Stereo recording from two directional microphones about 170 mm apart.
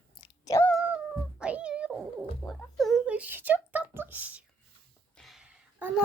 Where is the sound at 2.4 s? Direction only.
Centre (ahead or behind).